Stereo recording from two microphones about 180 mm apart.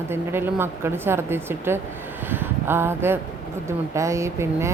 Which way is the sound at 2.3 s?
10° right (ahead or behind).